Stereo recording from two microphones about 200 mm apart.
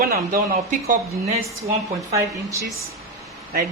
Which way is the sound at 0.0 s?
45° right (ahead or behind).